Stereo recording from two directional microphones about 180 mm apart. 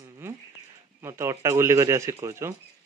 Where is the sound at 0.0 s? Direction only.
20° right (ahead or behind).